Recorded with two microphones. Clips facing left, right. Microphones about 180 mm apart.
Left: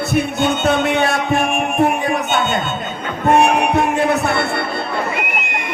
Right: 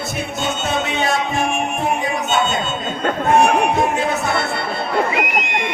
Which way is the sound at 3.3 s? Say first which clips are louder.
Left 1 dB; 60° left (ahead or behind).